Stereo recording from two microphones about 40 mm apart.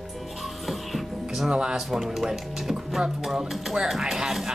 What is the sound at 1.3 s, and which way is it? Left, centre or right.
Speech, centre.